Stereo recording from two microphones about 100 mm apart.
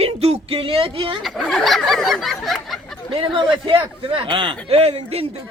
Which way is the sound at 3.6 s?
60° right (ahead or behind).